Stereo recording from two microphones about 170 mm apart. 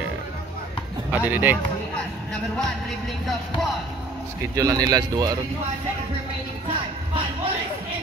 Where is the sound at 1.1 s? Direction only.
10° right (ahead or behind).